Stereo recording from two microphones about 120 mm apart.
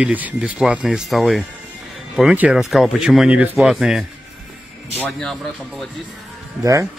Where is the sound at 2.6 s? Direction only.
Centre (ahead or behind).